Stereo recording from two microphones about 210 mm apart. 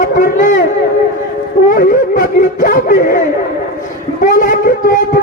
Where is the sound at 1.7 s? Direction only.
40° left (ahead or behind).